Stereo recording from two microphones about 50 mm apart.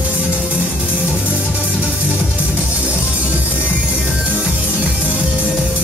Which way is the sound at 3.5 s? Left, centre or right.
Left.